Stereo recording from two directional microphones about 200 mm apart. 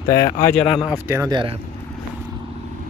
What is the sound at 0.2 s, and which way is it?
Speech, 40° left (ahead or behind).